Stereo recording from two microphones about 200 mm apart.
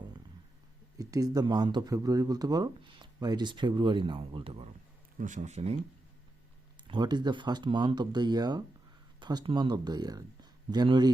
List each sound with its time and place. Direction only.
0.9 s speech: 20° right (ahead or behind)
5.1 s speech: 40° right (ahead or behind)
6.7 s speech: 20° right (ahead or behind)